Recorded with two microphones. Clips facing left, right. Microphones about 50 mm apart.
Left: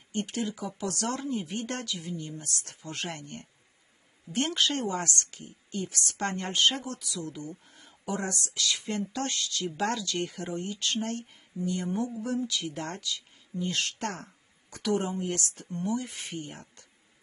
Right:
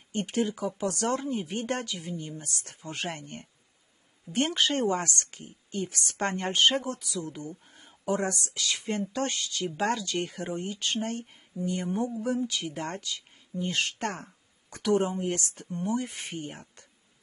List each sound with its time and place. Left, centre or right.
0.1 s speech: right